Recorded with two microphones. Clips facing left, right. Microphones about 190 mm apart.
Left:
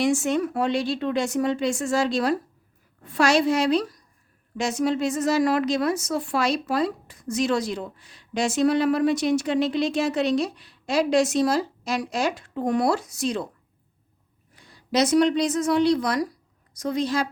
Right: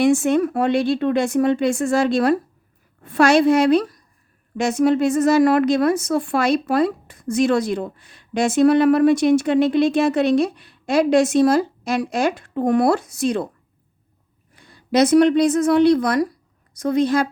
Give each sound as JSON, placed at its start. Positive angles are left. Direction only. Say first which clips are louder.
{"t": 0.0, "sound": "a woman's voice", "louder": "right 6 dB", "side_deg": -55}
{"t": 14.5, "sound": "a woman's voice", "louder": "right 5 dB", "side_deg": -55}